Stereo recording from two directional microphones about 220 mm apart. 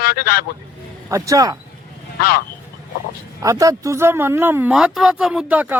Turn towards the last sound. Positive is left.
turn(degrees=-5)  # may be behind; listen again after turning